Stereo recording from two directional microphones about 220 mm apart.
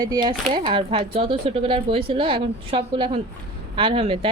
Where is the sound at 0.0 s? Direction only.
20° right (ahead or behind).